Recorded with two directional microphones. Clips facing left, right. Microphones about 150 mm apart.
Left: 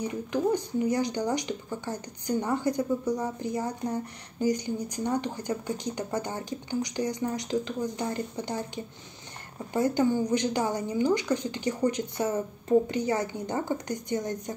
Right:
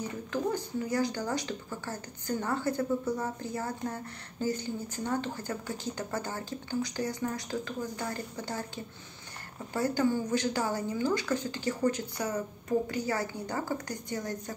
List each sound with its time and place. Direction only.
0.0 s a woman's voice: 15° left (ahead or behind)